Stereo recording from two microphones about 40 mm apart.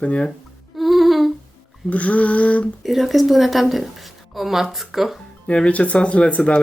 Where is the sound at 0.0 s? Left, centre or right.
Left.